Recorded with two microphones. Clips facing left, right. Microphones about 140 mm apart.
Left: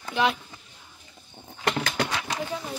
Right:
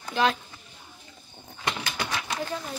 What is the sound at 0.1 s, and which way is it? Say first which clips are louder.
Speech: even; 15° left (ahead or behind).